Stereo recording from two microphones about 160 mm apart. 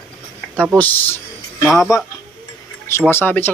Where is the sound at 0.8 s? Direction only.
10° left (ahead or behind).